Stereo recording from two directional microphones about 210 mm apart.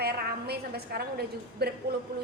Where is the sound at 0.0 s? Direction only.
50° right (ahead or behind).